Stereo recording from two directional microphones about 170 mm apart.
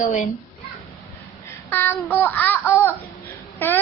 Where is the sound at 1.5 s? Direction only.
10° left (ahead or behind).